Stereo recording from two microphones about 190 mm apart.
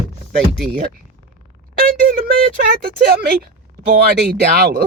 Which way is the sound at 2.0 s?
55° right (ahead or behind).